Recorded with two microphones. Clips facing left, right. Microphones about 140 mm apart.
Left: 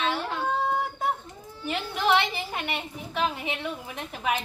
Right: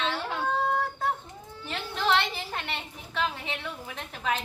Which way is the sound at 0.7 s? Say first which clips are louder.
Left 1 dB; 15° left (ahead or behind).